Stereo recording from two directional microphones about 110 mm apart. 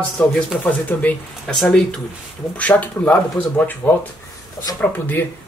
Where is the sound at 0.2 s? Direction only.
10° left (ahead or behind).